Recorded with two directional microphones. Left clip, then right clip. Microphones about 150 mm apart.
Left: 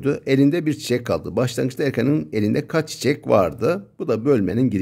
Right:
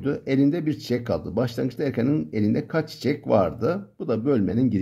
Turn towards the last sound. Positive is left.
turn(degrees=45)  # may be behind; listen again after turning